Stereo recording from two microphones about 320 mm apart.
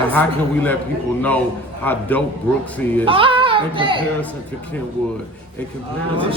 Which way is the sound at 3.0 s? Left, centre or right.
Centre.